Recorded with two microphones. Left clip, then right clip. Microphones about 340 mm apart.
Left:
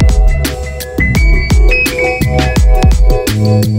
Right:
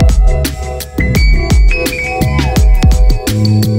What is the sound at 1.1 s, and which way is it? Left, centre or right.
Music, centre.